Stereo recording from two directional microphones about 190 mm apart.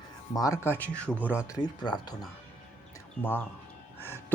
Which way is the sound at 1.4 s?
20° left (ahead or behind).